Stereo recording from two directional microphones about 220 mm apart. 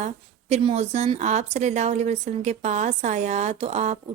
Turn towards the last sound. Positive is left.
turn(degrees=-30)  # may be behind; listen again after turning